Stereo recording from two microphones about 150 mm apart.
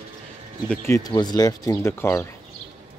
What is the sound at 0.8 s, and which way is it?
Speech, 25° left (ahead or behind).